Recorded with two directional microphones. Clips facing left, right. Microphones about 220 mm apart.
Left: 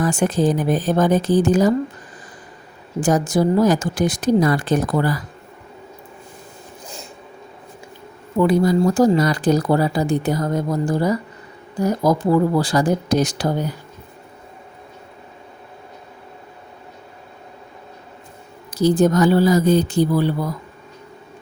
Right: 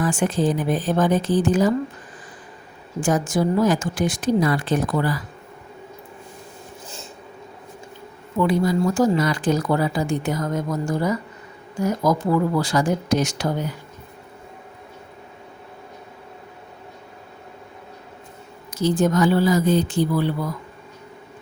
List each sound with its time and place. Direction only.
0.0 s speech: 40° left (ahead or behind)
3.0 s speech: 40° left (ahead or behind)
8.4 s speech: 40° left (ahead or behind)
18.7 s speech: 40° left (ahead or behind)